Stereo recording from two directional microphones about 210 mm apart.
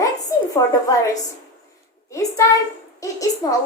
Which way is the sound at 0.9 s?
15° left (ahead or behind).